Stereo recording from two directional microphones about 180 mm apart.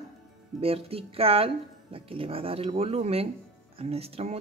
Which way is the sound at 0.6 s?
35° right (ahead or behind).